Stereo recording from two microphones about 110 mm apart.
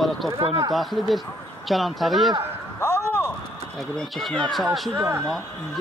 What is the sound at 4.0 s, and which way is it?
Speech, 5° left (ahead or behind).